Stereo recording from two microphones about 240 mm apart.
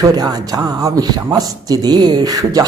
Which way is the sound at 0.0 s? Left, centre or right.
Centre.